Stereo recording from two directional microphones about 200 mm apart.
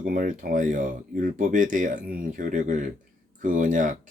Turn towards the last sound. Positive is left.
turn(degrees=-40)  # may be behind; listen again after turning